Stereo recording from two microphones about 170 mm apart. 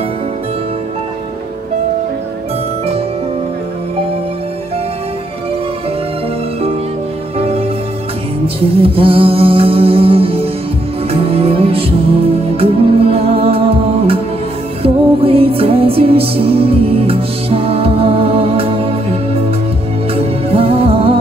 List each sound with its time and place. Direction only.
7.3 s music: 35° right (ahead or behind)
8.6 s music: 35° right (ahead or behind)
20.2 s music: 35° right (ahead or behind)